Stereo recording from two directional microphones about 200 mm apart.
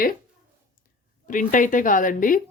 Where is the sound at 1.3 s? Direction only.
40° left (ahead or behind).